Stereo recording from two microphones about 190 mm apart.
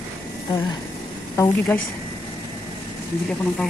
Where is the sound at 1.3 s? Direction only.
15° left (ahead or behind).